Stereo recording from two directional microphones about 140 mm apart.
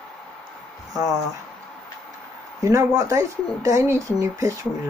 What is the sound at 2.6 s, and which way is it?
Speech, 20° right (ahead or behind).